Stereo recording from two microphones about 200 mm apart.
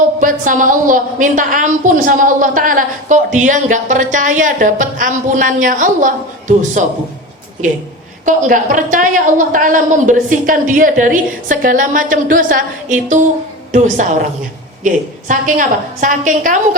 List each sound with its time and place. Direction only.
0.2 s a woman's voice: 40° right (ahead or behind)
8.2 s a woman's voice: 40° right (ahead or behind)